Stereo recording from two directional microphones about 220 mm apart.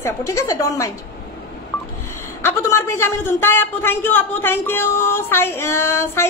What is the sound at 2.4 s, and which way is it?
Speech, 10° left (ahead or behind).